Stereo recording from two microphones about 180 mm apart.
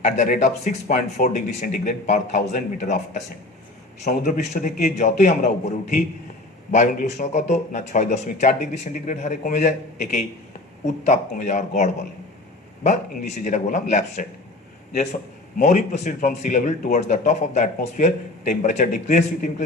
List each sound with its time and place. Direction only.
0.0 s speech: 40° left (ahead or behind)
15.5 s speech: 40° left (ahead or behind)